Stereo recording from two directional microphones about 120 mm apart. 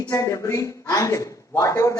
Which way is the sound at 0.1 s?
25° left (ahead or behind).